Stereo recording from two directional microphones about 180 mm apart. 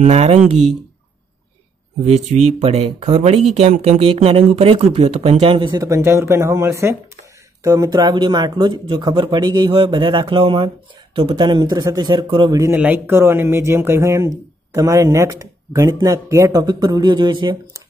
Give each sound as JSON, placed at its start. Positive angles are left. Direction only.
{"t": 0.0, "sound": "speech", "side_deg": -35}
{"t": 2.0, "sound": "speech", "side_deg": -40}